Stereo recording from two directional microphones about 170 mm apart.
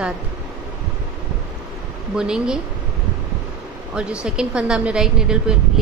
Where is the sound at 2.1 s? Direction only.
5° right (ahead or behind).